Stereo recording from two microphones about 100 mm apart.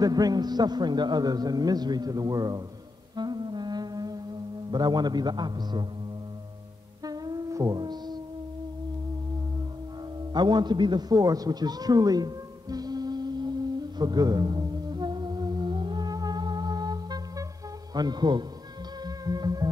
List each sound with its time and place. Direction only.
0.0 s a man's voice: 40° right (ahead or behind)
3.2 s music: 45° right (ahead or behind)
4.6 s a man's voice: 45° right (ahead or behind)
7.1 s humming: 40° right (ahead or behind)
10.3 s a sound: 45° right (ahead or behind)
17.9 s a man's voice: 45° right (ahead or behind)
19.0 s music: 40° right (ahead or behind)